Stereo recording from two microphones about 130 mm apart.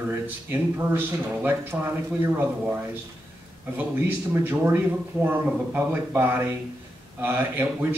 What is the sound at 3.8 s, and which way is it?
A man's voice, 15° right (ahead or behind).